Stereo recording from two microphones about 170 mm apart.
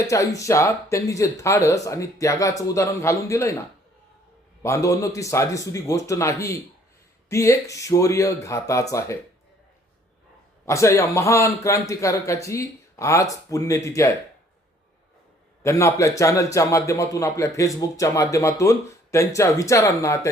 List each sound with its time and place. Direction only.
0.1 s a man's voice: 20° left (ahead or behind)
4.6 s a man's voice: 20° left (ahead or behind)
10.7 s a man's voice: 15° left (ahead or behind)
15.6 s a man's voice: 15° left (ahead or behind)